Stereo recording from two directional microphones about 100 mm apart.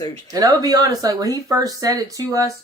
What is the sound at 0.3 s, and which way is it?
Speech, 40° right (ahead or behind).